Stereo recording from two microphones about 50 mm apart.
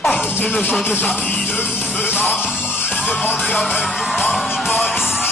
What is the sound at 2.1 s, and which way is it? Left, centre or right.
Music, left.